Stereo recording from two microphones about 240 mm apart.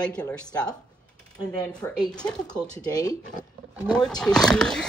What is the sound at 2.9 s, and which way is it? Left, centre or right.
Speech, centre.